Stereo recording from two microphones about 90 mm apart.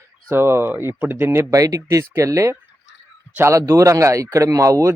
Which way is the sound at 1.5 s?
40° right (ahead or behind).